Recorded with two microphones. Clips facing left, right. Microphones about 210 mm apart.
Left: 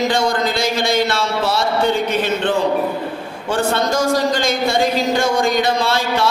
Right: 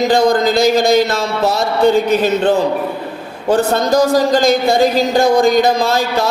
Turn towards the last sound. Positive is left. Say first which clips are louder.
# right 3 dB
turn(degrees=-40)  # may be behind; listen again after turning